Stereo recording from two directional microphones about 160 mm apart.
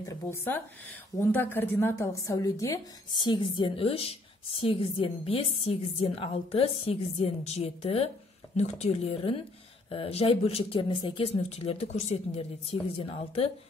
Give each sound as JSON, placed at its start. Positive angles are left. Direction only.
{"t": 0.1, "sound": "a woman's voice", "side_deg": 15}